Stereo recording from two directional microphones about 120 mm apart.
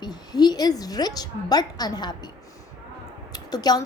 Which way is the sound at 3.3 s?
35° left (ahead or behind).